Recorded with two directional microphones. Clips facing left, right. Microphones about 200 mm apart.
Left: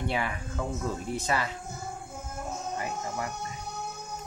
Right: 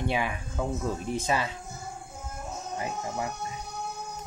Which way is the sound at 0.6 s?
15° right (ahead or behind).